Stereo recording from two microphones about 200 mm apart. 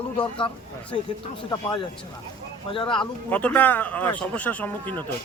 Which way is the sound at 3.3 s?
5° left (ahead or behind).